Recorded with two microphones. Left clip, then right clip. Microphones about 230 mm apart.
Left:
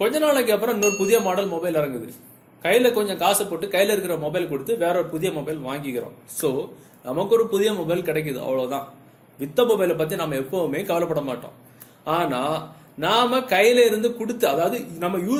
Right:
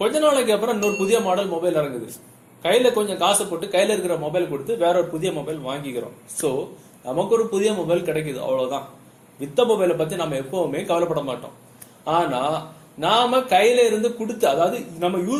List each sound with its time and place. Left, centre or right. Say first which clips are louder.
0.0 s a man's voice: right 1 dB; left
7.0 s a man's voice: even; left